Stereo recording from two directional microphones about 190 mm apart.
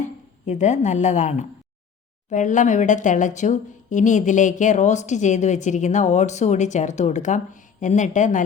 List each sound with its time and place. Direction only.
0.4 s a woman's voice: 40° left (ahead or behind)